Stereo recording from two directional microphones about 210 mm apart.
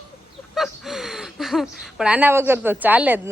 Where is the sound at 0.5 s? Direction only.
Centre (ahead or behind).